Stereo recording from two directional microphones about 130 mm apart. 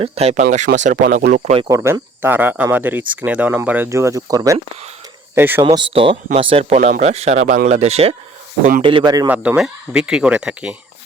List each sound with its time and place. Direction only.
0.0 s speech: 55° right (ahead or behind); by 1.5 s 75° right (ahead or behind)
1.7 s speech: 20° right (ahead or behind)
5.6 s speech: 45° right (ahead or behind)
6.7 s speech: 75° right (ahead or behind); by 8.1 s 55° right (ahead or behind)
8.8 s a man's voice: 40° right (ahead or behind)
9.3 s speech: 10° right (ahead or behind)